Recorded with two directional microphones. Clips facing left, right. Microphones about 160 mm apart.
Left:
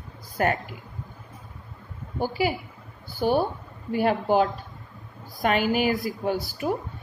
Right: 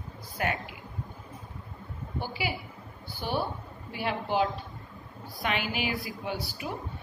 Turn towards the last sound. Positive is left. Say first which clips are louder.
# left 8 dB
turn(degrees=45)  # may be behind; listen again after turning